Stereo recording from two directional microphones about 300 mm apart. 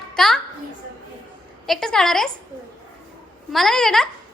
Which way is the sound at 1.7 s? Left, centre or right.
Centre.